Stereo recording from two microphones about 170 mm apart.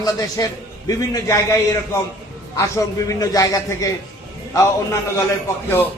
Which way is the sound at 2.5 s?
20° left (ahead or behind).